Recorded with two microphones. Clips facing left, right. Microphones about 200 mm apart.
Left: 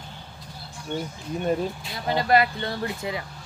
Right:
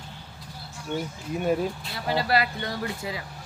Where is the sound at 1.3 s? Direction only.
5° right (ahead or behind).